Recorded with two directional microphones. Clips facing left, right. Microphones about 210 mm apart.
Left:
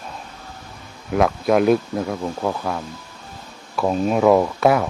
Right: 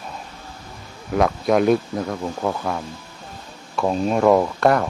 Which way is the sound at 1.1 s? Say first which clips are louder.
Left 1 dB; centre (ahead or behind).